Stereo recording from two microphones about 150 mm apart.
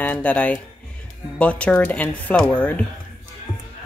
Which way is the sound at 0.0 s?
10° left (ahead or behind).